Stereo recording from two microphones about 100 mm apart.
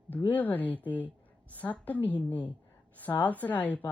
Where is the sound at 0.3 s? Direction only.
15° left (ahead or behind).